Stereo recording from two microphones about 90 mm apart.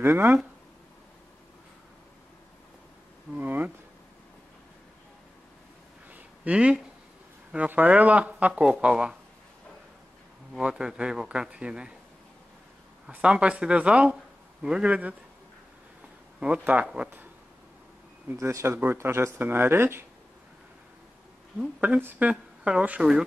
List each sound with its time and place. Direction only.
0.0 s speech: 25° right (ahead or behind)
3.3 s a sound: 20° right (ahead or behind)
6.1 s a sound: 15° right (ahead or behind)
7.5 s speech: 20° right (ahead or behind)
10.5 s speech: 10° right (ahead or behind)
13.1 s speech: 10° right (ahead or behind)
16.3 s speech: 15° right (ahead or behind)
18.3 s speech: 30° right (ahead or behind)
21.5 s speech: 10° right (ahead or behind)